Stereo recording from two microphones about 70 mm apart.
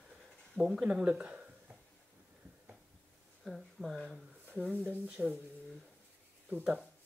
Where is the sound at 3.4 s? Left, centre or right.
Centre.